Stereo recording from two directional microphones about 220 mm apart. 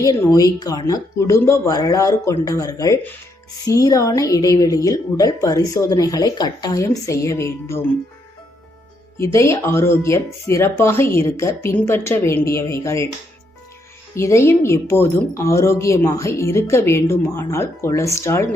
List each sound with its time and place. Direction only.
0.0 s speech: 15° left (ahead or behind)
9.1 s speech: 15° left (ahead or behind)
14.2 s speech: 10° left (ahead or behind)